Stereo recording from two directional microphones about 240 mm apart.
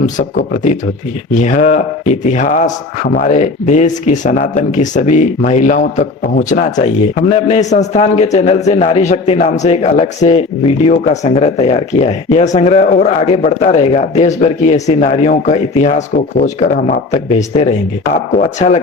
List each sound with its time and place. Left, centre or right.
0.0 s speech: left